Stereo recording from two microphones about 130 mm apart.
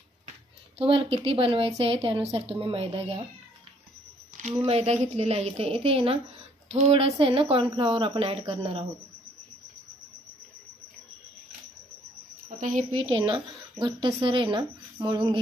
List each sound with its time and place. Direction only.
0.7 s speech: 45° right (ahead or behind)
4.4 s speech: 60° right (ahead or behind)
12.4 s speech: 80° right
13.1 s speech: 40° right (ahead or behind)